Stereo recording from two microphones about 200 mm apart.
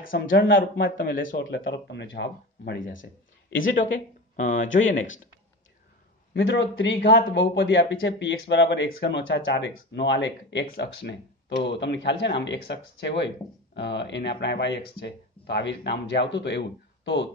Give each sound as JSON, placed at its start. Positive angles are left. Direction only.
{"t": 0.1, "sound": "speech", "side_deg": 60}
{"t": 0.6, "sound": "a man's voice", "side_deg": 45}
{"t": 1.4, "sound": "speech", "side_deg": 60}
{"t": 3.4, "sound": "speech", "side_deg": 75}
{"t": 3.7, "sound": "speech", "side_deg": 40}
{"t": 4.6, "sound": "speech", "side_deg": 70}
{"t": 6.3, "sound": "speech", "side_deg": 65}